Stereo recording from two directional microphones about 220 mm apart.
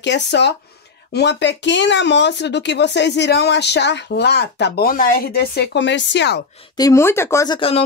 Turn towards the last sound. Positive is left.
turn(degrees=25)  # may be behind; listen again after turning